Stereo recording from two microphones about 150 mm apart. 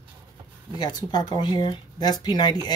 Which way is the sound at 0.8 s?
25° left (ahead or behind).